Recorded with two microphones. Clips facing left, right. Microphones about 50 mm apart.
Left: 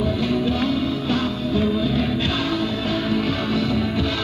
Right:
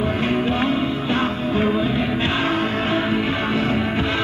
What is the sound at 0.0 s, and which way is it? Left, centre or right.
Music, right.